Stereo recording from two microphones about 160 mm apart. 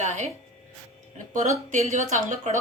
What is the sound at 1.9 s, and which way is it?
Speech, 50° right (ahead or behind).